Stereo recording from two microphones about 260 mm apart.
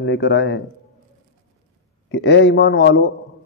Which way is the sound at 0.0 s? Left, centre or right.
Left.